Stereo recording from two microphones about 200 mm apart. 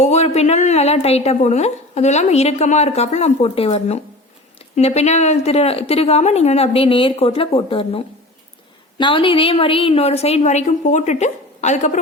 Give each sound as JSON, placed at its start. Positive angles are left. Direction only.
{"t": 0.0, "sound": "speech", "side_deg": 35}